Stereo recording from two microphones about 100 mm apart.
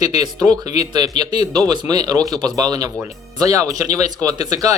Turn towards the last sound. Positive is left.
turn(degrees=-40)  # may be behind; listen again after turning